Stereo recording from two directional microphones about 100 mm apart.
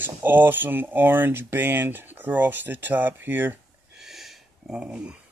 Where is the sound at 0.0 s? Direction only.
20° right (ahead or behind).